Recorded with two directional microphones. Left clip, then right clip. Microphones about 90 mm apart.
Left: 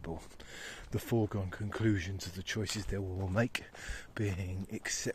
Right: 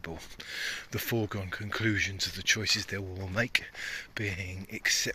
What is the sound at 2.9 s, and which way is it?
Speech, 30° left (ahead or behind).